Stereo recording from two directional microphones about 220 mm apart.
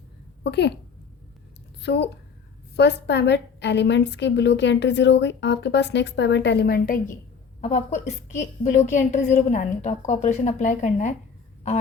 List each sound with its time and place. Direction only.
0.4 s a woman's voice: 50° left (ahead or behind)
1.8 s a woman's voice: 50° left (ahead or behind)
7.6 s a woman's voice: 30° left (ahead or behind)